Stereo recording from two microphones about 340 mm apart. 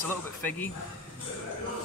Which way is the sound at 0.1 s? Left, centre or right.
Centre.